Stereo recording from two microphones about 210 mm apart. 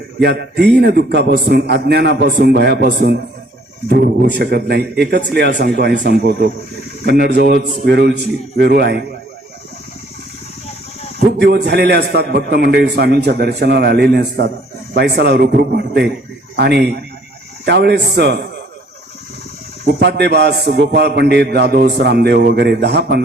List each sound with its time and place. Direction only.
0.2 s a man's voice: 50° right (ahead or behind)
11.3 s a man's voice: 50° right (ahead or behind)
20.0 s a man's voice: 55° right (ahead or behind)